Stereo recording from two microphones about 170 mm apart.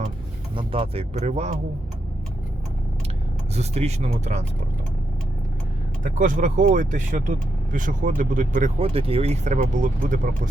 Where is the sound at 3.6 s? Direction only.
40° right (ahead or behind).